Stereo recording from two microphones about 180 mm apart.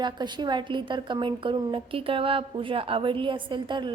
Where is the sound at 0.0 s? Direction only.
25° right (ahead or behind).